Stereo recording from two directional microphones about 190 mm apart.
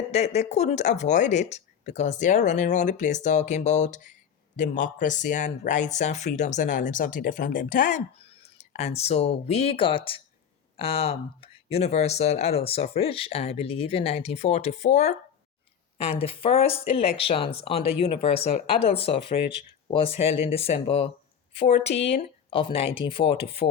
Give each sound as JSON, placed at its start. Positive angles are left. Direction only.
{"t": 0.1, "sound": "speech", "side_deg": 35}